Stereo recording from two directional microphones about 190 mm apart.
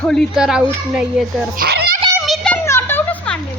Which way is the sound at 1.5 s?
55° right (ahead or behind).